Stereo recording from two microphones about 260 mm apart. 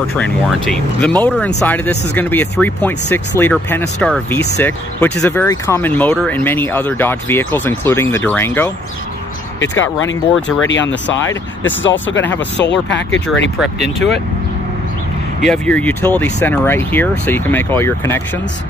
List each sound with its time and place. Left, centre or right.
0.1 s speech: centre
9.6 s speech: left
15.4 s speech: centre